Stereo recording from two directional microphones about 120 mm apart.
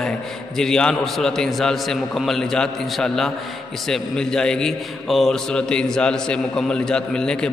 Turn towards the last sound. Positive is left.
turn(degrees=5)  # may be behind; listen again after turning